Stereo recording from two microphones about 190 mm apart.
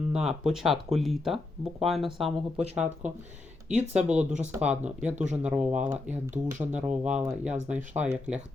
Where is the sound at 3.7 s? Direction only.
35° right (ahead or behind).